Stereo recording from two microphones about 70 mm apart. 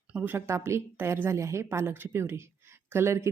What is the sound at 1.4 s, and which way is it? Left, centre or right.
Speech, right.